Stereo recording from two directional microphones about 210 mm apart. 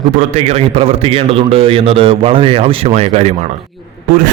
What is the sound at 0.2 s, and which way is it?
A man's voice, 30° right (ahead or behind).